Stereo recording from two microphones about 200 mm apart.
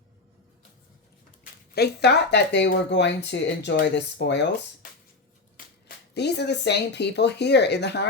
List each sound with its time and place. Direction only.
1.7 s speech: 55° left (ahead or behind)
5.6 s finger snapping: 45° left (ahead or behind)
6.1 s speech: 55° left (ahead or behind)